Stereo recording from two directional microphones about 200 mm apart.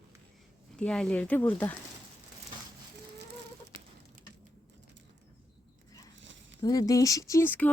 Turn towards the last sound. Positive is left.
turn(degrees=10)  # may be behind; listen again after turning